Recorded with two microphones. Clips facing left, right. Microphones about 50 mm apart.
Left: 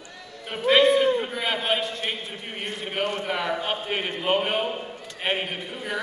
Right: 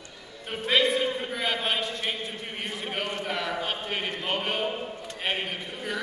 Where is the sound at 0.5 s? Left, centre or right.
Centre.